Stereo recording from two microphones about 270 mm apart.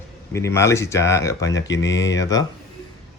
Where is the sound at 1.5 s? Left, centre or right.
Left.